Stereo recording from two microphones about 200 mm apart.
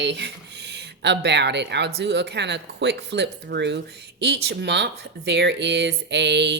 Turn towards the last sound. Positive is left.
turn(degrees=-60)  # may be behind; listen again after turning